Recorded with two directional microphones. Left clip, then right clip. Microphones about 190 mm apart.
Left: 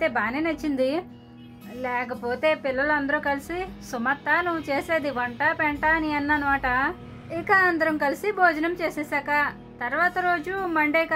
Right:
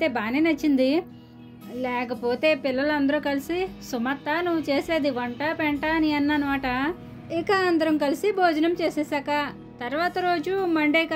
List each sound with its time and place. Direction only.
0.0 s a woman's voice: 25° right (ahead or behind)
2.4 s a woman's voice: 25° right (ahead or behind)
10.7 s a woman's voice: 40° right (ahead or behind)